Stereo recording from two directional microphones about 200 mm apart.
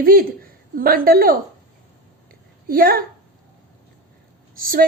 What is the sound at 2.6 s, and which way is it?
Speech, 45° right (ahead or behind).